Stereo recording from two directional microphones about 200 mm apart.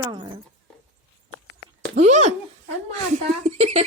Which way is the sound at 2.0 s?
35° right (ahead or behind).